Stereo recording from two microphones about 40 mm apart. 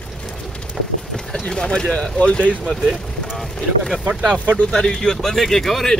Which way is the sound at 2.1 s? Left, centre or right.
Left.